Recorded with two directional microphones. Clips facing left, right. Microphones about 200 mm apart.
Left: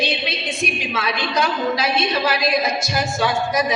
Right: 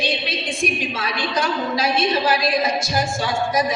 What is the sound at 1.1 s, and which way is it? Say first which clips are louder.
A woman's voice: even; 45° right (ahead or behind).